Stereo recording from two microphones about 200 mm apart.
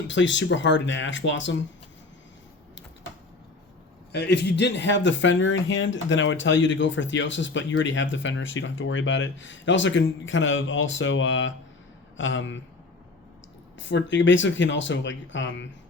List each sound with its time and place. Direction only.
0.1 s speech: 65° left (ahead or behind)
4.1 s speech: 55° left (ahead or behind)
13.7 s speech: 65° left (ahead or behind)